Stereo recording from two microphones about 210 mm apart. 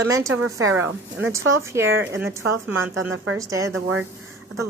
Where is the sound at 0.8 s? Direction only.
10° right (ahead or behind).